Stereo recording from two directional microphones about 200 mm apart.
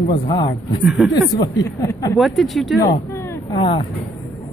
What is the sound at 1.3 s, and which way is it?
Speech, 20° left (ahead or behind).